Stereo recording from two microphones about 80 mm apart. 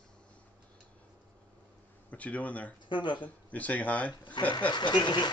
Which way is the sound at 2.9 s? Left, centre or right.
Left.